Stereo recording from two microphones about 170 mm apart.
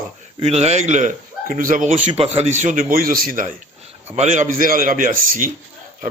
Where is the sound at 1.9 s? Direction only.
35° right (ahead or behind).